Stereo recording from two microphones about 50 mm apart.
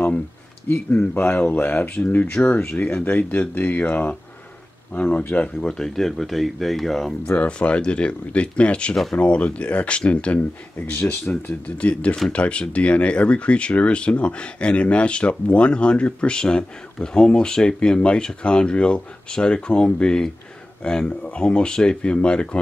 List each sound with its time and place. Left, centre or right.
0.7 s speech: left
2.9 s speech: left
5.6 s speech: centre
7.2 s speech: left
11.1 s speech: left
11.6 s speech: left